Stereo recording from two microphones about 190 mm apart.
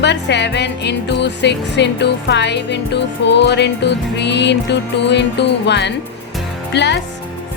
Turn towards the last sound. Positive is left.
turn(degrees=65)  # may be behind; listen again after turning